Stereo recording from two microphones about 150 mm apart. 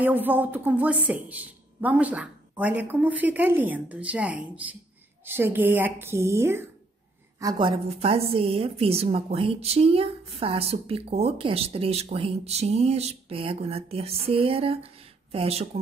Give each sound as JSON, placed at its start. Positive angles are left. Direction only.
{"t": 0.0, "sound": "a woman's voice", "side_deg": -10}
{"t": 7.3, "sound": "a woman's voice", "side_deg": -30}